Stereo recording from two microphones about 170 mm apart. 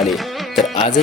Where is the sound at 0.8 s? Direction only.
40° left (ahead or behind).